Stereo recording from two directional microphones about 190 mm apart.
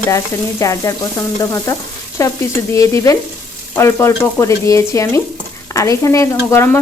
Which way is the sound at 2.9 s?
15° left (ahead or behind).